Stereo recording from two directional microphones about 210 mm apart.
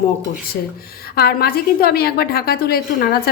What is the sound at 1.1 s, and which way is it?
A woman's voice, 45° left (ahead or behind).